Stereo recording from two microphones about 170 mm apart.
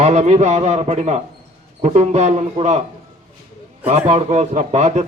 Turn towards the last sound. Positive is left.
turn(degrees=-40)  # may be behind; listen again after turning